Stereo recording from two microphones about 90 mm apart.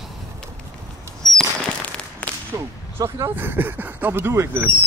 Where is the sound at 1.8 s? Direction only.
15° left (ahead or behind).